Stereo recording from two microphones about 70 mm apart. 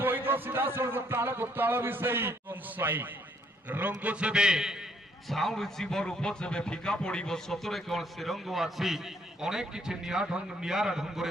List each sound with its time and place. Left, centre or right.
0.0 s a man's voice: right; by 4.9 s centre
5.3 s a man's voice: centre